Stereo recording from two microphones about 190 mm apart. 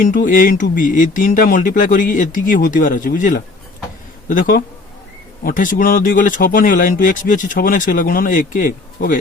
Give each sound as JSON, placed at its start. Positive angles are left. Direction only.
{"t": 0.0, "sound": "speech", "side_deg": 45}